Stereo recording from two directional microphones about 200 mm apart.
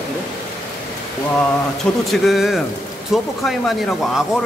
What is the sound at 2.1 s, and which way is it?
Speech, centre (ahead or behind).